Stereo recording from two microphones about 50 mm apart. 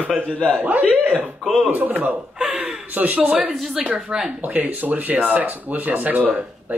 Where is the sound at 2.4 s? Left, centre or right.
Centre.